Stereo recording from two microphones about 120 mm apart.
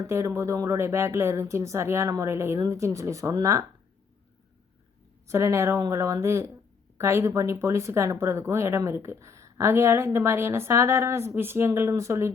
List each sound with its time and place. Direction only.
0.1 s speech: 25° right (ahead or behind)
5.3 s speech: 25° right (ahead or behind)